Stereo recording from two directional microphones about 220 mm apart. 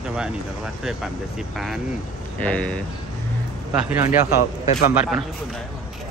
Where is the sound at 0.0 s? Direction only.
5° right (ahead or behind).